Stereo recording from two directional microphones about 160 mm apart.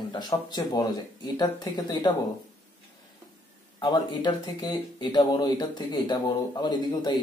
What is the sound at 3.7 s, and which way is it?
Speech, 30° left (ahead or behind).